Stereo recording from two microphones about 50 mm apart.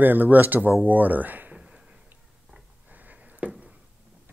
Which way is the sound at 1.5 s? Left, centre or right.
Centre.